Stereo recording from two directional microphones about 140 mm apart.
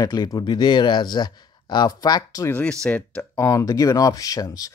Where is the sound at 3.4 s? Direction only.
25° left (ahead or behind).